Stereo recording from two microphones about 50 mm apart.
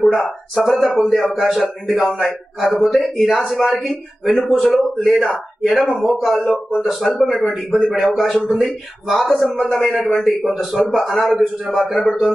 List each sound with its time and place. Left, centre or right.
0.6 s a man's voice: centre
9.8 s a man's voice: centre